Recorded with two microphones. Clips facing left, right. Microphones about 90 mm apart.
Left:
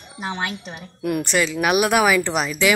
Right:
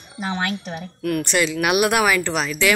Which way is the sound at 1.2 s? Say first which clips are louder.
Even; centre (ahead or behind).